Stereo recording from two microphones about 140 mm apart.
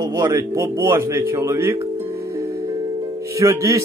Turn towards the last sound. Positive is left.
turn(degrees=-20)  # may be behind; listen again after turning